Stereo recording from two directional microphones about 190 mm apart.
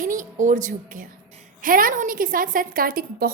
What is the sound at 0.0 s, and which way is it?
A woman's voice, 45° right (ahead or behind).